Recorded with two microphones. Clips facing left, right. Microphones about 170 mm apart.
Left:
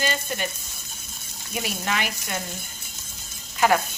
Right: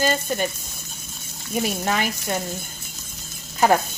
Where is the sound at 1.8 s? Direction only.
40° right (ahead or behind).